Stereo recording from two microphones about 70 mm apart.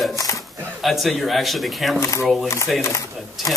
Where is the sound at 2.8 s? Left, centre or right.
Left.